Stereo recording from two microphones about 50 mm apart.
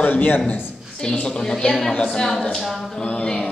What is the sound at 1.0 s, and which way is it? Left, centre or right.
A woman's voice, centre.